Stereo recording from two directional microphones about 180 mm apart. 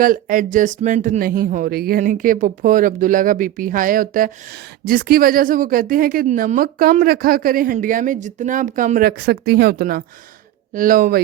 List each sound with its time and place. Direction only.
0.0 s a woman's voice: 50° right (ahead or behind)